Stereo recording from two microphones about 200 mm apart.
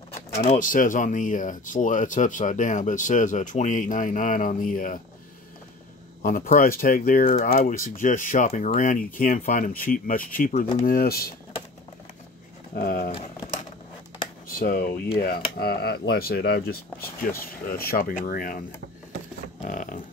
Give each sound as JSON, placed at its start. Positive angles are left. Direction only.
{"t": 0.5, "sound": "speech", "side_deg": 40}
{"t": 6.2, "sound": "speech", "side_deg": 45}
{"t": 12.7, "sound": "speech", "side_deg": 45}
{"t": 14.6, "sound": "speech", "side_deg": 45}
{"t": 19.6, "sound": "speech", "side_deg": 40}